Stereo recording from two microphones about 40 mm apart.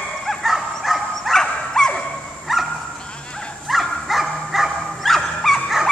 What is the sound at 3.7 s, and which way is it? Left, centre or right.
Dog, centre.